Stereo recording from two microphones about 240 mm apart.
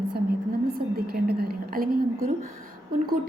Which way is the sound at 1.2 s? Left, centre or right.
Right.